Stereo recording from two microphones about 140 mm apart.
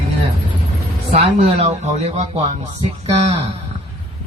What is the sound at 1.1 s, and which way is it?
Speech, 55° right (ahead or behind).